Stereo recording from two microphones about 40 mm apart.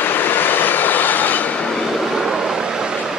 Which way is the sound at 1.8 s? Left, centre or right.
Centre.